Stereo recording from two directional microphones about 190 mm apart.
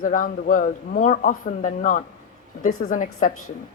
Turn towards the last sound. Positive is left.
turn(degrees=40)  # may be behind; listen again after turning